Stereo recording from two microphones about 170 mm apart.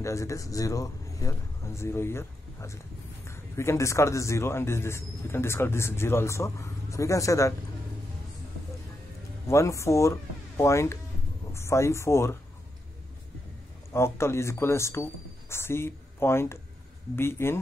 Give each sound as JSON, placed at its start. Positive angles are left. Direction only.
{"t": 0.0, "sound": "a man's voice", "side_deg": 20}
{"t": 9.5, "sound": "a man's voice", "side_deg": 15}
{"t": 13.9, "sound": "a man's voice", "side_deg": 15}